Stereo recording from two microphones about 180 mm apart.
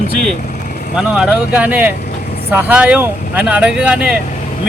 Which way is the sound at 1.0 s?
5° right (ahead or behind).